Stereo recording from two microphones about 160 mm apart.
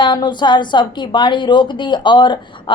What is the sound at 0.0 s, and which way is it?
A woman's voice, 30° left (ahead or behind).